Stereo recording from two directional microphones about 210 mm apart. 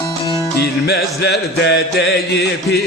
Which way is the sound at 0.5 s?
50° left (ahead or behind).